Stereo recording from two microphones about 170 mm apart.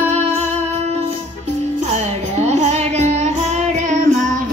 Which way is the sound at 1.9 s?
40° right (ahead or behind).